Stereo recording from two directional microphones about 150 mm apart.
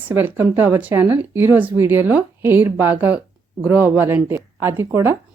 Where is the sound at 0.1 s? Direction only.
15° right (ahead or behind).